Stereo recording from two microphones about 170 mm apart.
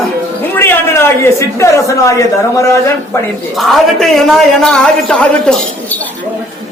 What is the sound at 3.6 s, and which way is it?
A man's voice, centre (ahead or behind).